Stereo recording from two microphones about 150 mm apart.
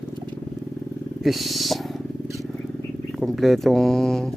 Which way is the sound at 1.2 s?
Centre (ahead or behind).